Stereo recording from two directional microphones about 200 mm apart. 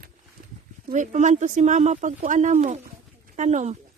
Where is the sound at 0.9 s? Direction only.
35° right (ahead or behind).